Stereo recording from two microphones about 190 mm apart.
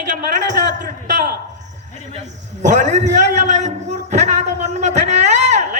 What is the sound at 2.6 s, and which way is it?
Speech, 40° right (ahead or behind).